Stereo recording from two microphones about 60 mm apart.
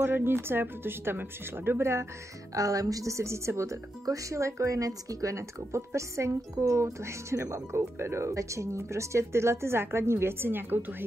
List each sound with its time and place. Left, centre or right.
0.0 s speech: right
2.5 s speech: right
4.0 s speech: right
7.0 s speech: right